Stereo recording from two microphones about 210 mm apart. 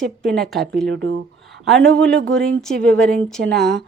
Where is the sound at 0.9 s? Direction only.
60° right (ahead or behind).